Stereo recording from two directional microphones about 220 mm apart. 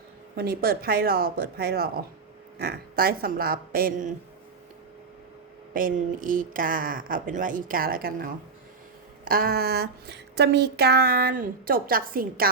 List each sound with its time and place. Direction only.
0.3 s speech: 45° right (ahead or behind)
5.7 s speech: 40° right (ahead or behind)